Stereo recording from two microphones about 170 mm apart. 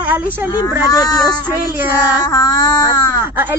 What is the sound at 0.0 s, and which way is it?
Speech, 10° right (ahead or behind).